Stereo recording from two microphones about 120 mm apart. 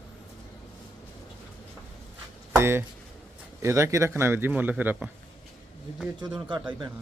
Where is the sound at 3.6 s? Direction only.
25° right (ahead or behind).